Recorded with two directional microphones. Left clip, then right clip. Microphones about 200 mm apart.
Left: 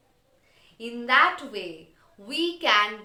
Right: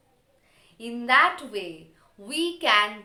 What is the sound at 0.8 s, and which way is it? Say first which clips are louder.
A woman's voice: even; 15° right (ahead or behind).